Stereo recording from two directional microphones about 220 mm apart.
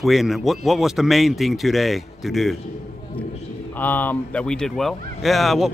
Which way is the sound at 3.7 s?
10° left (ahead or behind).